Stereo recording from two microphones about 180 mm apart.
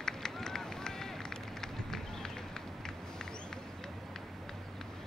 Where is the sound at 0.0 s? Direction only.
5° left (ahead or behind).